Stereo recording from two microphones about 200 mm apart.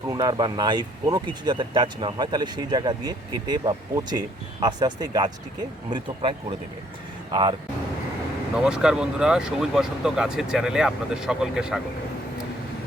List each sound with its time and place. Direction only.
0.1 s speech: 20° right (ahead or behind)
8.5 s speech: 5° right (ahead or behind)